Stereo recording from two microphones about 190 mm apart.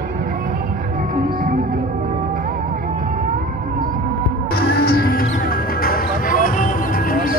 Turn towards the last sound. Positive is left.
turn(degrees=50)  # may be behind; listen again after turning